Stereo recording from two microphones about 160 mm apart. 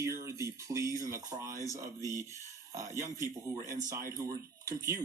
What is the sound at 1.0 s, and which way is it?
Speech, 20° right (ahead or behind).